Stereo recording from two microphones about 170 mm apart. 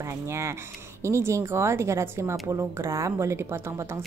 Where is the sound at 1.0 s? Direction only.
15° right (ahead or behind).